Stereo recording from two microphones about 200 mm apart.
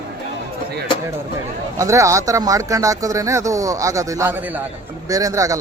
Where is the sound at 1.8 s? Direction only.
15° right (ahead or behind).